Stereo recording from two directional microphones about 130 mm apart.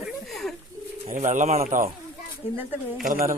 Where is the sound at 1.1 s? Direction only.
75° right (ahead or behind).